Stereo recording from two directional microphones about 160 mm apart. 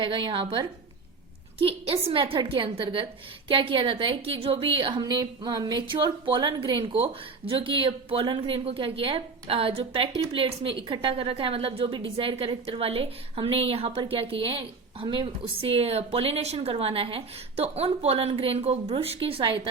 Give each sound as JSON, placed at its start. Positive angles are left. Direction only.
{"t": 0.0, "sound": "a woman's voice", "side_deg": -30}